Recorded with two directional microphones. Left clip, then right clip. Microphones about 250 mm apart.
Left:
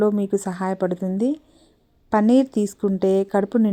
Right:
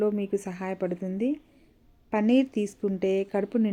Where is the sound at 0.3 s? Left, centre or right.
Left.